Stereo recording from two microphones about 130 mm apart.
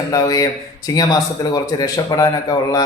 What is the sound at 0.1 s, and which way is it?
Speech, 30° left (ahead or behind).